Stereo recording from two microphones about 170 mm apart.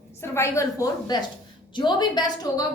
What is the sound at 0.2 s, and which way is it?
A woman's voice, 15° left (ahead or behind).